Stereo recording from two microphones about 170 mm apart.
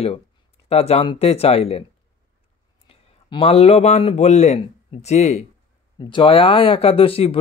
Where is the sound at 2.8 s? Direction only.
35° left (ahead or behind).